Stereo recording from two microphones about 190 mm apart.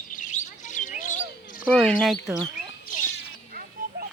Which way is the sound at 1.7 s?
5° left (ahead or behind).